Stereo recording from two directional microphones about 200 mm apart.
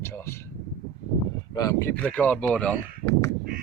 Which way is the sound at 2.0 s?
5° left (ahead or behind).